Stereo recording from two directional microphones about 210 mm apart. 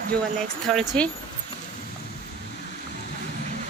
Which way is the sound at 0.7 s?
5° left (ahead or behind).